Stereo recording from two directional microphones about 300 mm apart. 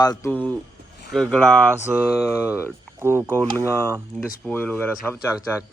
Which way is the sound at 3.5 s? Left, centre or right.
Centre.